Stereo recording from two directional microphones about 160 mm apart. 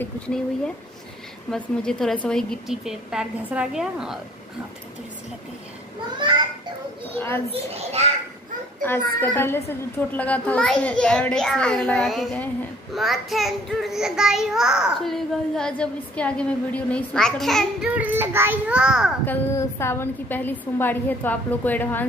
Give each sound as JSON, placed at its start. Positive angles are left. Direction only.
{"t": 0.0, "sound": "a child's voice", "side_deg": 5}
{"t": 6.1, "sound": "a child's voice", "side_deg": -30}
{"t": 7.2, "sound": "a child's voice", "side_deg": 15}
{"t": 7.5, "sound": "a child's voice", "side_deg": -40}
{"t": 9.2, "sound": "a child's voice", "side_deg": 15}
{"t": 19.2, "sound": "a child's voice", "side_deg": 15}